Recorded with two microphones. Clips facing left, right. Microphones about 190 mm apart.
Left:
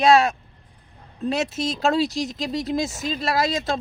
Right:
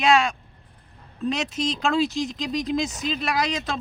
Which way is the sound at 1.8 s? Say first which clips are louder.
Left 2 dB; 40° left (ahead or behind).